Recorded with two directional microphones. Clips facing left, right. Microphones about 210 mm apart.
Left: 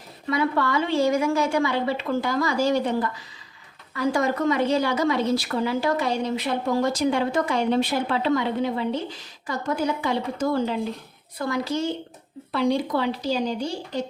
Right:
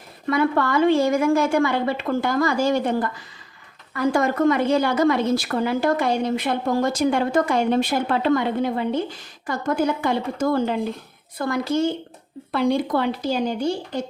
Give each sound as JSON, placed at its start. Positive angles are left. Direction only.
{"t": 0.3, "sound": "a woman's voice", "side_deg": -50}